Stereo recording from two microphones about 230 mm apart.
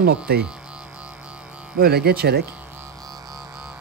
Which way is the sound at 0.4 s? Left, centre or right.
Centre.